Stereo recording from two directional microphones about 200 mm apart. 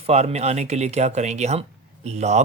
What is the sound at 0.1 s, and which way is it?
Speech, 30° right (ahead or behind).